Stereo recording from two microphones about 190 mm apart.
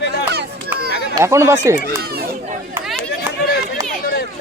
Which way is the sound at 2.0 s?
55° right (ahead or behind).